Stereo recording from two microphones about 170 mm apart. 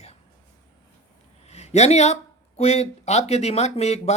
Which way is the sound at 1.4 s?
40° left (ahead or behind).